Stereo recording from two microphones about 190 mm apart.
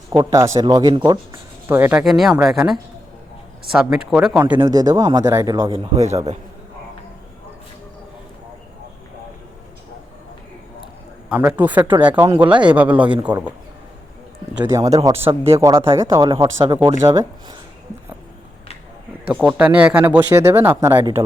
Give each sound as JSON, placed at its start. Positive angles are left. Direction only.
{"t": 0.2, "sound": "speech", "side_deg": -15}
{"t": 11.3, "sound": "speech", "side_deg": -10}
{"t": 14.5, "sound": "speech", "side_deg": -10}
{"t": 19.3, "sound": "speech", "side_deg": -5}
{"t": 21.0, "sound": "speech", "side_deg": -30}